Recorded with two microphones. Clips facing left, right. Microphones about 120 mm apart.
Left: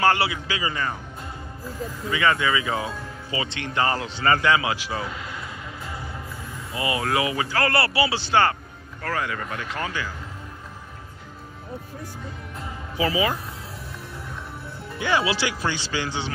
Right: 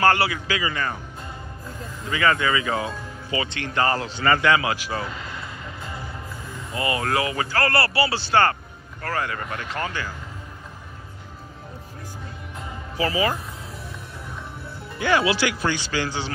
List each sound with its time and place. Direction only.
0.0 s speech: 15° left (ahead or behind)
2.0 s speech: 15° left (ahead or behind)
3.3 s speech: 25° left (ahead or behind)
6.7 s speech: 15° left (ahead or behind)
9.0 s speech: 5° left (ahead or behind)
12.9 s speech: 10° left (ahead or behind)
15.0 s speech: 25° left (ahead or behind)